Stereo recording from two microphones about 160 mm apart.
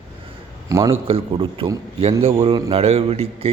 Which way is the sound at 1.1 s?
35° right (ahead or behind).